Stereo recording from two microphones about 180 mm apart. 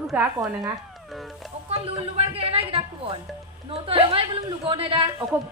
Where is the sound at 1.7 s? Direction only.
35° right (ahead or behind).